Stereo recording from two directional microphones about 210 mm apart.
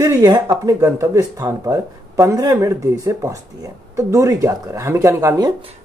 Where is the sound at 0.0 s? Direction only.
15° right (ahead or behind).